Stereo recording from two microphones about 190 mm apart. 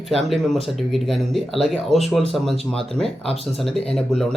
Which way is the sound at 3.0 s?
30° left (ahead or behind).